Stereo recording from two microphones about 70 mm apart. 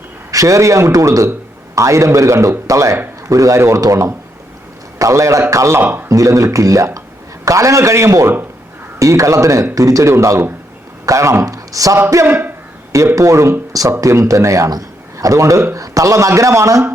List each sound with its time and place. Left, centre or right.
0.3 s a man's voice: right
5.8 s speech: right
6.1 s a man's voice: right
12.2 s speech: right
13.1 s a man's voice: right
14.7 s a man's voice: right